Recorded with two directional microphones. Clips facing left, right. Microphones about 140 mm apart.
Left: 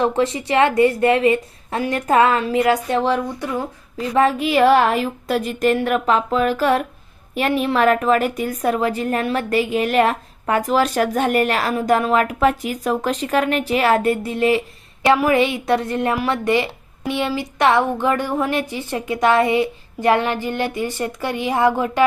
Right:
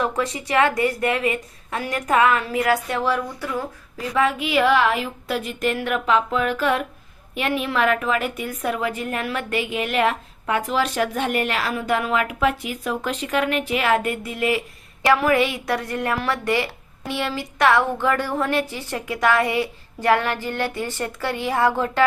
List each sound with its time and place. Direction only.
0.0 s a woman's voice: 25° left (ahead or behind)
3.9 s a woman's voice: 35° left (ahead or behind); by 22.0 s 15° left (ahead or behind)